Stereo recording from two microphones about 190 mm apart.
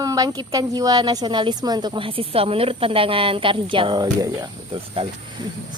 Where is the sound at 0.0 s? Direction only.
20° right (ahead or behind).